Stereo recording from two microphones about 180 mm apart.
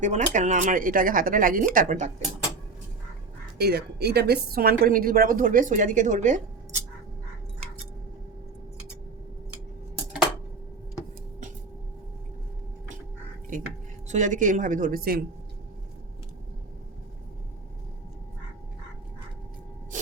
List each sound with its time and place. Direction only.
0.0 s a woman's voice: 40° right (ahead or behind)
3.6 s a woman's voice: 65° right (ahead or behind); by 6.4 s 45° right (ahead or behind)
13.5 s a woman's voice: 50° right (ahead or behind)
19.9 s a sound: 45° right (ahead or behind)